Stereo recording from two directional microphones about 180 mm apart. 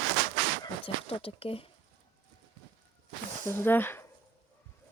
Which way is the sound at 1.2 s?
30° left (ahead or behind).